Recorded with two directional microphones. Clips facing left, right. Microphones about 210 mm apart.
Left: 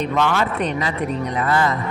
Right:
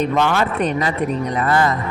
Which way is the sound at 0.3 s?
45° right (ahead or behind).